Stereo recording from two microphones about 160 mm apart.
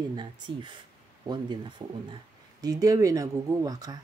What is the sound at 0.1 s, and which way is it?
Speech, 30° right (ahead or behind).